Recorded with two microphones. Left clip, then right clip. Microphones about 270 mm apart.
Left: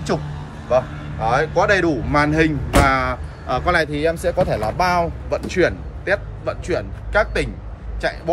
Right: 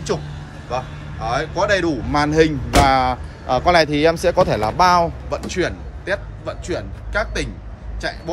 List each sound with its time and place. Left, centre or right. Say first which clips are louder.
0.7 s speech: left 7 dB; centre
5.3 s a man's voice: left 4 dB; centre